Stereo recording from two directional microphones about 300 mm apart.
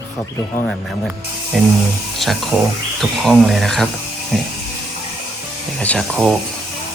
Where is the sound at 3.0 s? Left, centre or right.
Centre.